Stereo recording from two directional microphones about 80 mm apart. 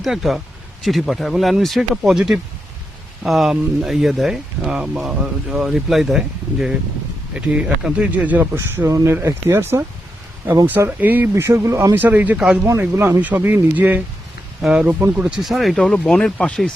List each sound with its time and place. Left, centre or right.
0.0 s speech: centre; by 8.4 s right
8.5 s speech: right
10.8 s speech: right
11.4 s speech: right
11.9 s speech: right
14.6 s speech: centre
14.8 s speech: right
15.4 s speech: centre